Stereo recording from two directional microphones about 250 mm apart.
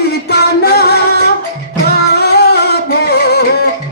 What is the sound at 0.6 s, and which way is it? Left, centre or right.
Music, left.